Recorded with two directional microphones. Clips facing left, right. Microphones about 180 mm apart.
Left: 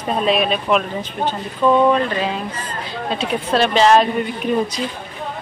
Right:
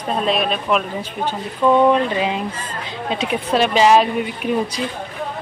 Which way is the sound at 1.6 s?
15° right (ahead or behind).